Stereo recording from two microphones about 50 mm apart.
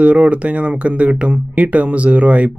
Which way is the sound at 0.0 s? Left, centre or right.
Right.